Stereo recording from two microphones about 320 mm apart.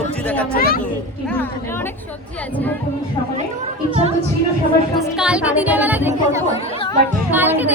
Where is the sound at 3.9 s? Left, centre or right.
Centre.